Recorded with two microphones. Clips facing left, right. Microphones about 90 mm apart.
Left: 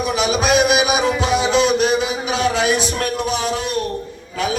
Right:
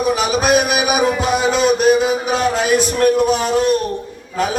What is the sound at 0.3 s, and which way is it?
Music, 45° right (ahead or behind).